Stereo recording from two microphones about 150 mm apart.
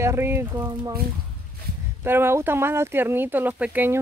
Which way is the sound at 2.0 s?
15° right (ahead or behind).